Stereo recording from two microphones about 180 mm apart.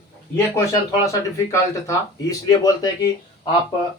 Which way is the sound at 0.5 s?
20° left (ahead or behind).